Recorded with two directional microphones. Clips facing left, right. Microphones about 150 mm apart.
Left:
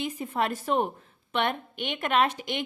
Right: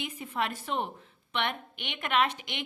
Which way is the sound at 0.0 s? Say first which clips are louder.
Left 4 dB; 40° left (ahead or behind).